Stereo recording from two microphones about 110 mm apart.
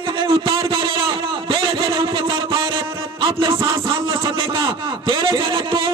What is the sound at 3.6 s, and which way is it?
Music, 50° right (ahead or behind).